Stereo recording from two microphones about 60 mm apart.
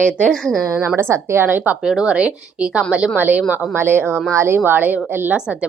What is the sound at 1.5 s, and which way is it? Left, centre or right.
Speech, right.